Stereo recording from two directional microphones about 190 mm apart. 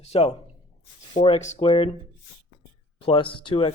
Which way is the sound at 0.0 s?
35° left (ahead or behind).